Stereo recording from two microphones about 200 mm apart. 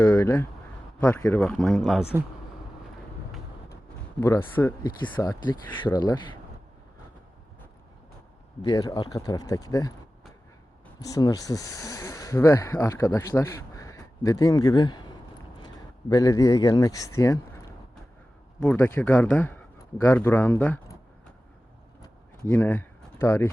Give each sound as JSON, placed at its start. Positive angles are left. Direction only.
{"t": 0.0, "sound": "speech", "side_deg": 15}
{"t": 4.2, "sound": "speech", "side_deg": 10}
{"t": 8.6, "sound": "speech", "side_deg": 20}
{"t": 11.1, "sound": "speech", "side_deg": 20}
{"t": 17.2, "sound": "a sound", "side_deg": 15}
{"t": 18.6, "sound": "speech", "side_deg": 10}
{"t": 22.0, "sound": "a sound", "side_deg": 15}